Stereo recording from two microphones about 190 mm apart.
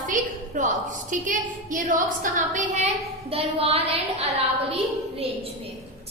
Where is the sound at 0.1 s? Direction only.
40° right (ahead or behind).